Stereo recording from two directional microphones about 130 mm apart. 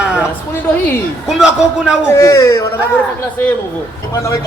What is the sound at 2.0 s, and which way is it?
Speech, 20° left (ahead or behind).